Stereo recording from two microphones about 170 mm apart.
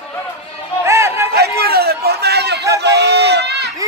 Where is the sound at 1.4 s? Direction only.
65° right (ahead or behind).